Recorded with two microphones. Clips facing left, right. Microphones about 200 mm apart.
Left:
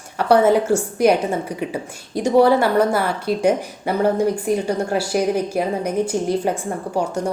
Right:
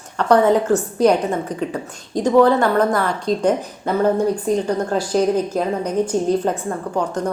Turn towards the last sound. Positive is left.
turn(degrees=10)  # may be behind; listen again after turning